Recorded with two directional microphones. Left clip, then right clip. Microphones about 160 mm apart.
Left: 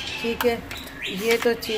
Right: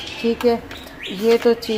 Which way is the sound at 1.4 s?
20° right (ahead or behind).